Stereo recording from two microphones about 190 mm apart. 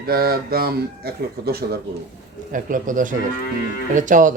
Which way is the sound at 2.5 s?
45° right (ahead or behind).